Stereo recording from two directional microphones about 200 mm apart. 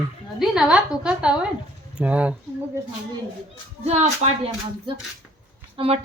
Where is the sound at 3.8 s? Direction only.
30° right (ahead or behind).